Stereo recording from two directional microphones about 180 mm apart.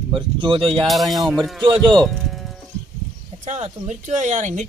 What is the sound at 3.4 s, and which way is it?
Speech, 40° right (ahead or behind).